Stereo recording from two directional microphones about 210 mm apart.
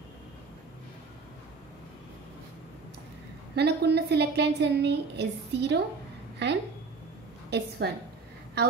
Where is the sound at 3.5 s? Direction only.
50° right (ahead or behind).